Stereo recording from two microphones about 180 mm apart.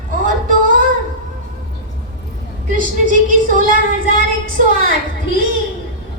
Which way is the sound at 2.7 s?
45° right (ahead or behind).